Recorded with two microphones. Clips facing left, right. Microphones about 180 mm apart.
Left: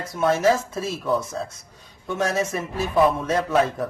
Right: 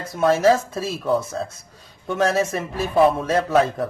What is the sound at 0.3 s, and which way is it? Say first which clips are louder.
A man's voice: right 3 dB; 30° right (ahead or behind).